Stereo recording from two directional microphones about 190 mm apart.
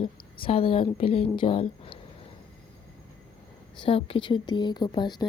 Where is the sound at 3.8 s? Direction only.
30° left (ahead or behind).